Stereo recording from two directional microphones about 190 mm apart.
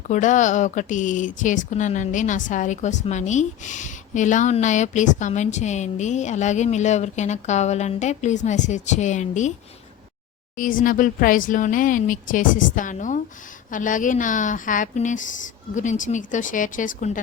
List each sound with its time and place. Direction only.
0.1 s a woman's voice: 40° left (ahead or behind)
10.6 s speech: 45° left (ahead or behind)